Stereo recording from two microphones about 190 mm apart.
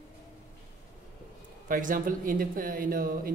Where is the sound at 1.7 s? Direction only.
45° right (ahead or behind).